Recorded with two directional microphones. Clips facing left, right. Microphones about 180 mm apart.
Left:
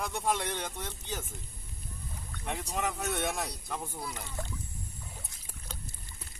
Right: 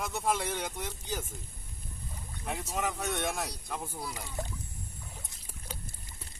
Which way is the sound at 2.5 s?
Centre (ahead or behind).